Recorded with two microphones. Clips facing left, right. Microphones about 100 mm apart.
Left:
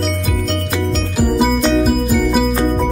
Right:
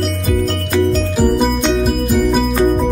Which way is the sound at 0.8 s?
Centre (ahead or behind).